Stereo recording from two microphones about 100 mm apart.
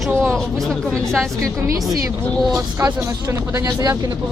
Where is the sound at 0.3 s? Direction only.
5° left (ahead or behind).